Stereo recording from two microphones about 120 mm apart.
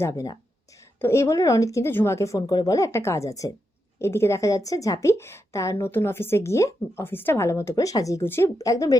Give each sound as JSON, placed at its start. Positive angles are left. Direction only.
{"t": 0.0, "sound": "a woman's voice", "side_deg": 30}